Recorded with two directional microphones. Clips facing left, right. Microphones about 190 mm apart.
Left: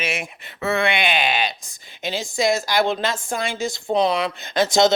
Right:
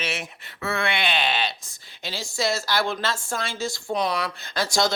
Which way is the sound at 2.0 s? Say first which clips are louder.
Left 5 dB; 20° left (ahead or behind).